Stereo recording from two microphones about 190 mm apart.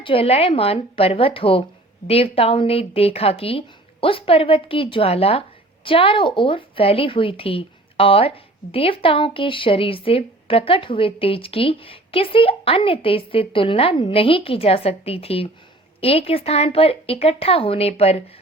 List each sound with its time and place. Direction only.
0.0 s a woman's voice: 30° left (ahead or behind)